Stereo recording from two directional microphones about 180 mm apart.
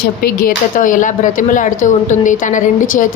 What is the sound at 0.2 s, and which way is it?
A woman's voice, 55° left (ahead or behind).